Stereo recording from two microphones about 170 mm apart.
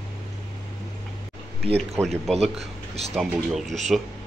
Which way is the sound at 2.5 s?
40° right (ahead or behind).